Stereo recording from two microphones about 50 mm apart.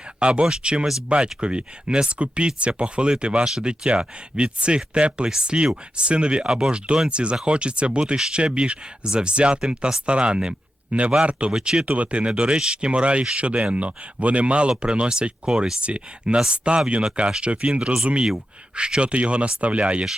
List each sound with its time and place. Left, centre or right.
0.2 s speech: right
11.5 s speech: centre
11.9 s speech: right